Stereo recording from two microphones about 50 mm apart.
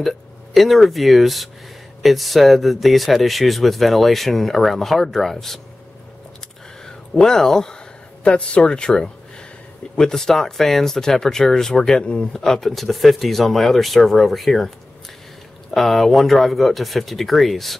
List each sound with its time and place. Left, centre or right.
0.6 s speech: centre
7.2 s speech: centre
8.2 s speech: left
12.4 s speech: centre
15.7 s speech: centre